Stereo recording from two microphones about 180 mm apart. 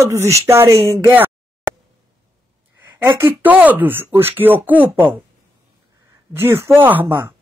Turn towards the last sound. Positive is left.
turn(degrees=-10)  # may be behind; listen again after turning